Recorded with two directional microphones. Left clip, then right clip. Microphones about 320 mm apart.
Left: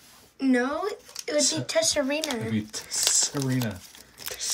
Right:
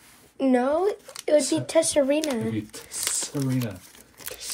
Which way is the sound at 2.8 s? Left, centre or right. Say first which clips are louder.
Left 9 dB; left.